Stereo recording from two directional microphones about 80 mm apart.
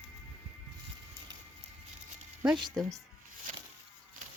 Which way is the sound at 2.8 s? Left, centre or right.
Centre.